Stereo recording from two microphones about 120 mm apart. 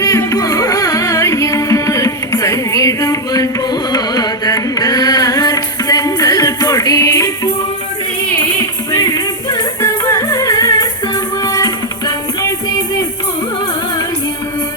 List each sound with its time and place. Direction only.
0.0 s music: 30° left (ahead or behind)
8.9 s music: 30° left (ahead or behind)